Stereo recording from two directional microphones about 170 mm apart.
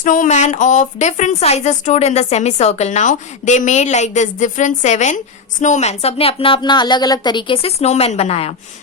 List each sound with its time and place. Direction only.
0.0 s speech: 50° left (ahead or behind)